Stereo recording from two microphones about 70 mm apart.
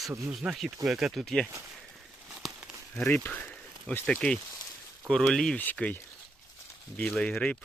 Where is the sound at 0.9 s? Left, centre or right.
Centre.